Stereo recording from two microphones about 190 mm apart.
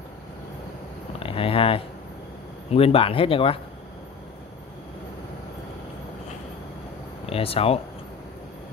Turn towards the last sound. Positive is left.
turn(degrees=30)  # may be behind; listen again after turning